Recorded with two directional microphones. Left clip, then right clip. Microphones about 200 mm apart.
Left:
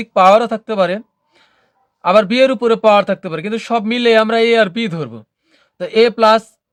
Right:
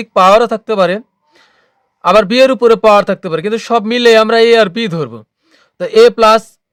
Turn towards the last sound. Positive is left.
turn(degrees=-40)  # may be behind; listen again after turning